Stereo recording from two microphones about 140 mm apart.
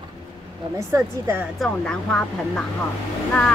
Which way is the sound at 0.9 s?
20° right (ahead or behind).